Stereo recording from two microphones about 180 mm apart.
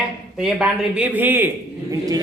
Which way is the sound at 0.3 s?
5° right (ahead or behind).